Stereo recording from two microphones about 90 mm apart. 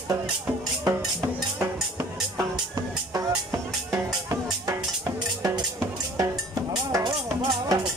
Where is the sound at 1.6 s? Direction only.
35° right (ahead or behind).